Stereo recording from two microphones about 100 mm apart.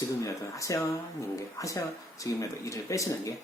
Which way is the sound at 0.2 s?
30° left (ahead or behind).